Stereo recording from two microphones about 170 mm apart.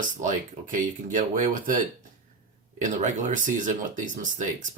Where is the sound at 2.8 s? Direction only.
45° right (ahead or behind).